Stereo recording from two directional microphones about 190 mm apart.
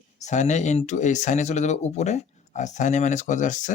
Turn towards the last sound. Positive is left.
turn(degrees=40)  # may be behind; listen again after turning